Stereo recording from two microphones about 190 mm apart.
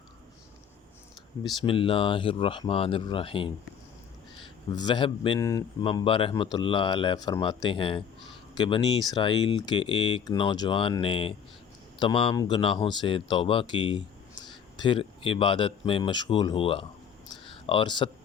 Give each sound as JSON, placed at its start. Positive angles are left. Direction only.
{"t": 1.6, "sound": "speech", "side_deg": 30}
{"t": 4.7, "sound": "speech", "side_deg": 20}
{"t": 17.4, "sound": "a sound", "side_deg": 25}